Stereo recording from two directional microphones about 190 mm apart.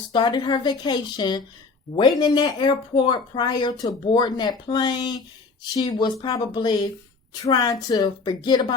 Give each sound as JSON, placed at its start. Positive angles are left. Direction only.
{"t": 0.1, "sound": "speech", "side_deg": 25}